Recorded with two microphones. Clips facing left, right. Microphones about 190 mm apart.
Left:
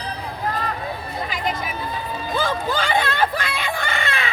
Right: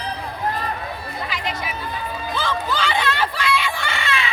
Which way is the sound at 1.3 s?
45° left (ahead or behind).